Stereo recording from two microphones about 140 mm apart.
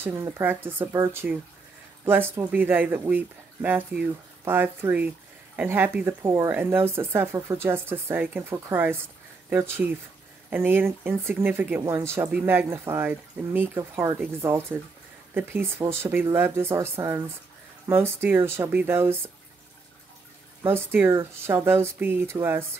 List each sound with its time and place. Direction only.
0.0 s speech: 15° right (ahead or behind)
20.6 s speech: 15° right (ahead or behind)